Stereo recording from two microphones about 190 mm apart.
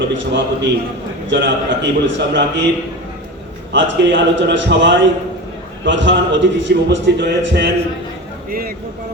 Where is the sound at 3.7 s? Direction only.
75° right (ahead or behind).